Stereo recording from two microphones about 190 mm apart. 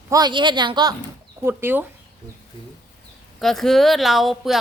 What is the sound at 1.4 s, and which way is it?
Speech, 10° right (ahead or behind).